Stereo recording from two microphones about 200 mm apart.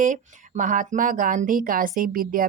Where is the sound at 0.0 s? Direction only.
40° right (ahead or behind).